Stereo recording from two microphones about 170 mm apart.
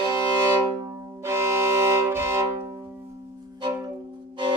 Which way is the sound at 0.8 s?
15° right (ahead or behind).